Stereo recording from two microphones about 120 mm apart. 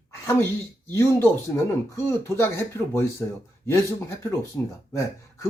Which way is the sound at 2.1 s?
20° left (ahead or behind).